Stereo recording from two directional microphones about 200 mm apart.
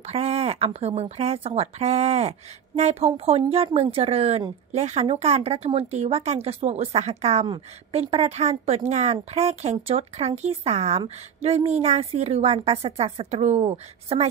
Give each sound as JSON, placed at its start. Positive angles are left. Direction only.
{"t": 0.1, "sound": "speech", "side_deg": -30}